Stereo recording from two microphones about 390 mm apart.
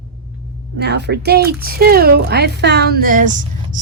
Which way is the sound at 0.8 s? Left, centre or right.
Right.